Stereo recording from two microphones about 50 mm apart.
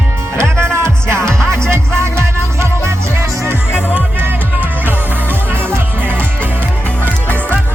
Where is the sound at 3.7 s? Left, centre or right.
Right.